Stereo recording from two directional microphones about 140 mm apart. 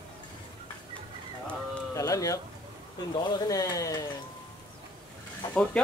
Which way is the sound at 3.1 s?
30° left (ahead or behind).